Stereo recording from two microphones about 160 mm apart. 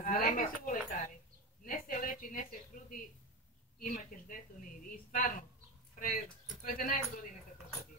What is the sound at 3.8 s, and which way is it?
Speech, 60° left (ahead or behind).